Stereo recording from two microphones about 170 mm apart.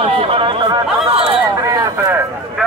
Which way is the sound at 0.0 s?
35° right (ahead or behind).